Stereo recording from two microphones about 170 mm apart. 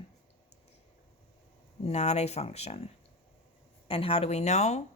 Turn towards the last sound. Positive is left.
turn(degrees=40)  # may be behind; listen again after turning